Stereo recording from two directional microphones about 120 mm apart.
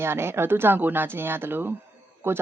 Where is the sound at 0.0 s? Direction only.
20° right (ahead or behind).